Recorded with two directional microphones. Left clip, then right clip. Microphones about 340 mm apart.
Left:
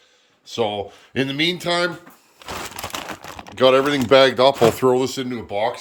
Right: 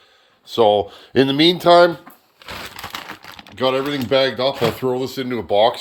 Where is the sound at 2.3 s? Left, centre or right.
Left.